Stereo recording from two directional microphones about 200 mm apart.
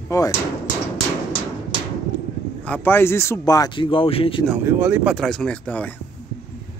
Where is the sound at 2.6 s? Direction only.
10° left (ahead or behind); by 4.4 s 25° left (ahead or behind).